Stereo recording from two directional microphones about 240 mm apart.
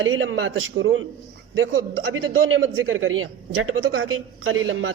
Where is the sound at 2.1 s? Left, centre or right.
Right.